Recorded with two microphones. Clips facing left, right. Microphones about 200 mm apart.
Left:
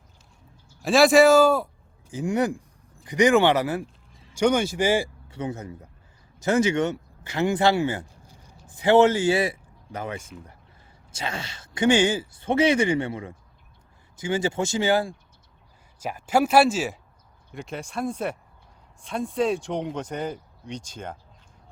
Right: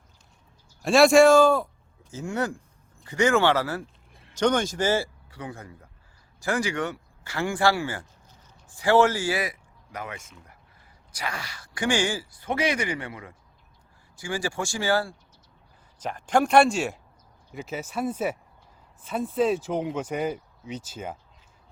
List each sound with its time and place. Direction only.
0.8 s speech: centre (ahead or behind); by 3.8 s 15° left (ahead or behind)
4.1 s a sound: 60° right (ahead or behind)
4.4 s speech: 10° left (ahead or behind)
5.3 s speech: 25° left (ahead or behind)
16.0 s speech: 10° left (ahead or behind)